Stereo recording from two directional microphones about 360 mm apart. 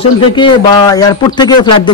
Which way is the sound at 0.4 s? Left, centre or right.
Centre.